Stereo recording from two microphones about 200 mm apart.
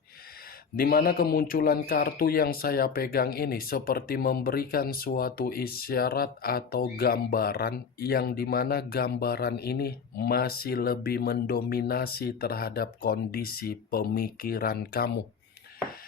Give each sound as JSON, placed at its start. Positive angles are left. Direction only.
{"t": 0.8, "sound": "speech", "side_deg": 50}